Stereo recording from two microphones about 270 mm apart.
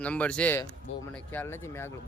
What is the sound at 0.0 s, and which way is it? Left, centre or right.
Speech, centre.